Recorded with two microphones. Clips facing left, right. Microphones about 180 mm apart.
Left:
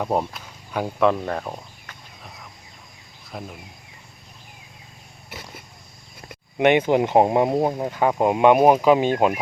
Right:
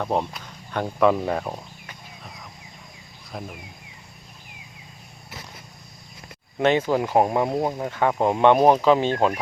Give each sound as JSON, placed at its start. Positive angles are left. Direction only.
{"t": 0.0, "sound": "speech", "side_deg": 5}
{"t": 3.3, "sound": "speech", "side_deg": 0}
{"t": 6.6, "sound": "speech", "side_deg": 15}